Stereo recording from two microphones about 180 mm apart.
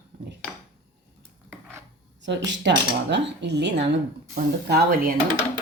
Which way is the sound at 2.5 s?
75° right (ahead or behind).